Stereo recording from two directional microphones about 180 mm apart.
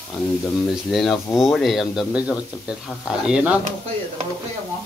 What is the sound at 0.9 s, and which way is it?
Speech, centre (ahead or behind).